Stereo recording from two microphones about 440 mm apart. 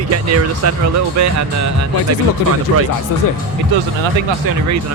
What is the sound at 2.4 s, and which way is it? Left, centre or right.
Speech, left.